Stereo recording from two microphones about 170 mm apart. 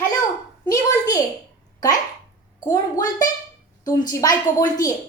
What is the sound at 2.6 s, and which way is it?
A woman's voice, 20° left (ahead or behind).